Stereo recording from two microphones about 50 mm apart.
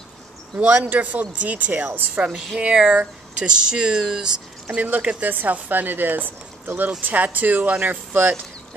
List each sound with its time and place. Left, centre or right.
0.6 s speech: right
2.6 s speech: right
4.7 s speech: right